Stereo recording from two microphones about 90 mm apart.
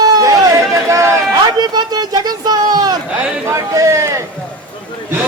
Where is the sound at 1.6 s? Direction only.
50° right (ahead or behind).